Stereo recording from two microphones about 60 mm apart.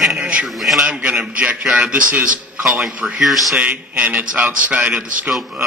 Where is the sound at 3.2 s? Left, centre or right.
Centre.